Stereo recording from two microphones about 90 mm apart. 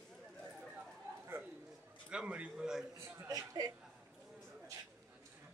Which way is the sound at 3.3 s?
45° right (ahead or behind).